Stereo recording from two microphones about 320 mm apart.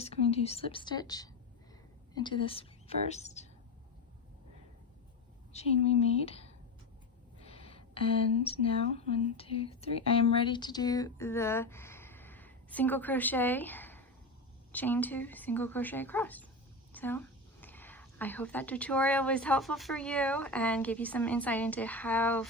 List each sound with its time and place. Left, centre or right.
0.0 s a woman's voice: centre
5.5 s a woman's voice: centre
7.4 s a sound: centre
8.4 s a woman's voice: centre